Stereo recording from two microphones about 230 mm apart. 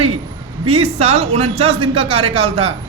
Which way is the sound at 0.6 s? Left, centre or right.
Right.